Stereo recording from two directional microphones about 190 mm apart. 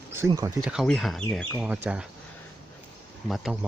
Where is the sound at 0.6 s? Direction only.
Centre (ahead or behind).